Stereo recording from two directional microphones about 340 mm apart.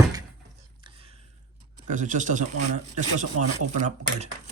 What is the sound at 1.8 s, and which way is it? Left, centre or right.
Speech, right.